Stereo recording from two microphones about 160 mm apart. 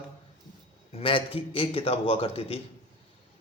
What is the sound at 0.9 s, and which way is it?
Speech, 35° left (ahead or behind).